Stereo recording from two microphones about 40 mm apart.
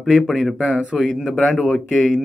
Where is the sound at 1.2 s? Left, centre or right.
Centre.